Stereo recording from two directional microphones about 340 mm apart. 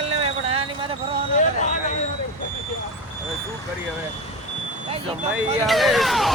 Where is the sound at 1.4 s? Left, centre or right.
Left.